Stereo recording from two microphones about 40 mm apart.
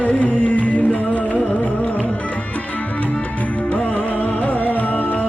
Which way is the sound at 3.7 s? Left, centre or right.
Left.